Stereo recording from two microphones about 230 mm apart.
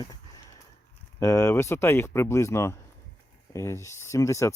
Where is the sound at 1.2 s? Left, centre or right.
Centre.